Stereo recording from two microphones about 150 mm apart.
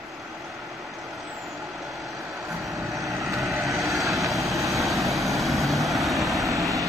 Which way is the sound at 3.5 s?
20° right (ahead or behind).